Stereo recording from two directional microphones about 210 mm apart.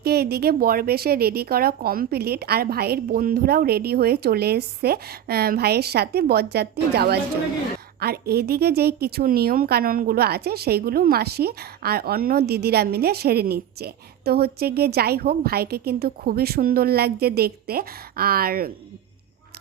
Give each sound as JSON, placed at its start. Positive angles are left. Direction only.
{"t": 0.0, "sound": "a woman's voice", "side_deg": -50}